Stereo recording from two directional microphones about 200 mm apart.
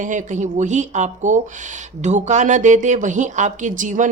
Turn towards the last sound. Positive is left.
turn(degrees=-40)  # may be behind; listen again after turning